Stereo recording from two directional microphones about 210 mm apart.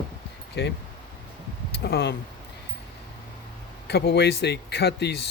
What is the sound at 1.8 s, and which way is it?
Speech, 50° left (ahead or behind).